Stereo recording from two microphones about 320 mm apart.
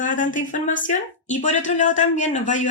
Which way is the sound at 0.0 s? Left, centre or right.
Left.